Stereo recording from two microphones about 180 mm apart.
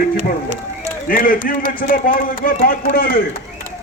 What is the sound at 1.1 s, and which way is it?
A man's voice, 50° left (ahead or behind).